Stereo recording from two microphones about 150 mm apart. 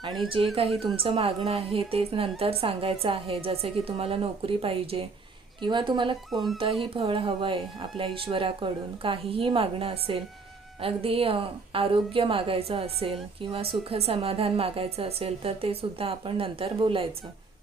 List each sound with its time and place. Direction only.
0.4 s a woman's voice: 35° right (ahead or behind)